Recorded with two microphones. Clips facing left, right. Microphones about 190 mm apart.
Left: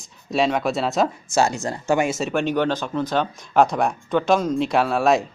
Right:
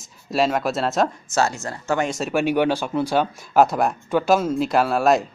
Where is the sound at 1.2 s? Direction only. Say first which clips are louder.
Left 2 dB; 15° left (ahead or behind).